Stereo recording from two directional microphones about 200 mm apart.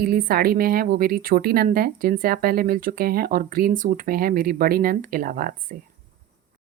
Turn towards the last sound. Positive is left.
turn(degrees=-45)  # may be behind; listen again after turning